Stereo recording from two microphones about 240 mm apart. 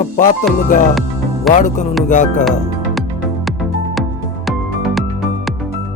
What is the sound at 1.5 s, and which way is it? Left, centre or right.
Speech, left.